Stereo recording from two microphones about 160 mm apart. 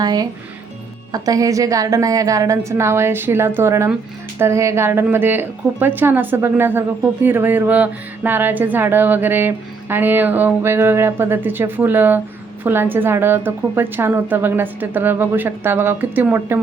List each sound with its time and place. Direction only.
0.0 s a woman's voice: 25° right (ahead or behind)